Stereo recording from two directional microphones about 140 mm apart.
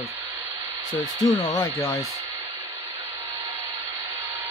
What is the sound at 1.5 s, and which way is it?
Speech, 25° left (ahead or behind).